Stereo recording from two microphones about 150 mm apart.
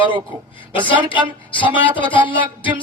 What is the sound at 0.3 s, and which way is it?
Speech, 30° right (ahead or behind).